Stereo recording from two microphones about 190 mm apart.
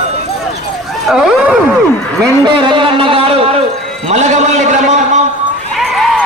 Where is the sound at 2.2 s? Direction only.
25° right (ahead or behind).